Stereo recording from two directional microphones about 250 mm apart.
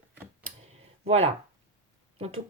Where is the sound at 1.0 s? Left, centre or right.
Right.